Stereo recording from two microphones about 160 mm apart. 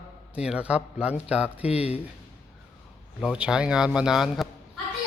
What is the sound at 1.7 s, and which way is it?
Speech, 40° left (ahead or behind).